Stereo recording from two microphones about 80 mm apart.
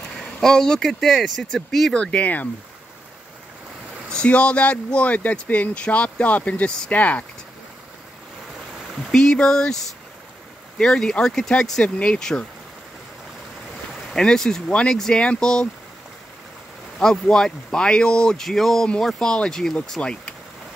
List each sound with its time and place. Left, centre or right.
0.1 s speech: centre
2.0 s speech: centre
4.1 s a man's voice: centre
9.1 s a man's voice: centre
10.8 s a man's voice: centre
14.1 s a man's voice: centre
17.0 s a man's voice: centre